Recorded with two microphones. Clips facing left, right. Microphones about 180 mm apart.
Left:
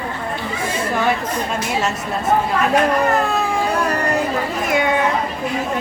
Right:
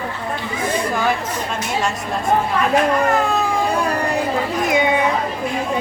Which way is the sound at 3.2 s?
Centre (ahead or behind).